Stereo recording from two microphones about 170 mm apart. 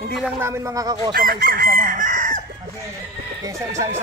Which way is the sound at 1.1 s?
60° right (ahead or behind).